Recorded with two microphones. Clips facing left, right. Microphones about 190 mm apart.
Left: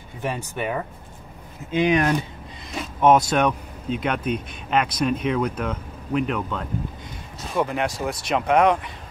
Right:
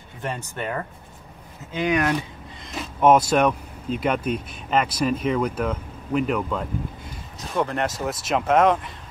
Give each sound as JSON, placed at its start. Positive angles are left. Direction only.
{"t": 0.2, "sound": "speech", "side_deg": 10}
{"t": 1.7, "sound": "speech", "side_deg": 20}
{"t": 2.8, "sound": "speech", "side_deg": -5}